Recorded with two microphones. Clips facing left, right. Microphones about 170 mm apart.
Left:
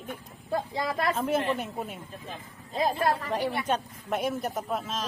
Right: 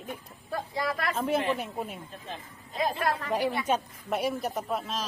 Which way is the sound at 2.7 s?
30° left (ahead or behind).